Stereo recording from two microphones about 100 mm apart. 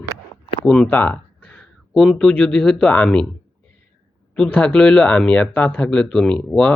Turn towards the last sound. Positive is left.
turn(degrees=10)  # may be behind; listen again after turning